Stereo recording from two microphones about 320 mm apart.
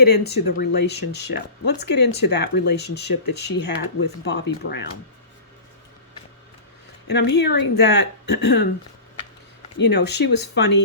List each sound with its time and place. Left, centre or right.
0.0 s speech: left
7.1 s speech: left
9.7 s speech: left